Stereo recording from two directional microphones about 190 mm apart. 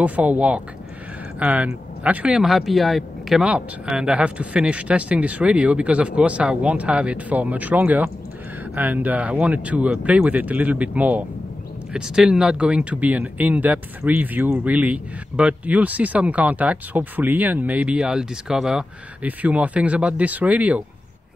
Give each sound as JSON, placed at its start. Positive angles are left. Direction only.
{"t": 0.0, "sound": "speech", "side_deg": -10}